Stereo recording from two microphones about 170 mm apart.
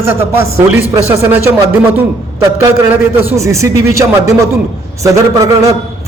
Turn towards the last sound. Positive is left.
turn(degrees=-20)  # may be behind; listen again after turning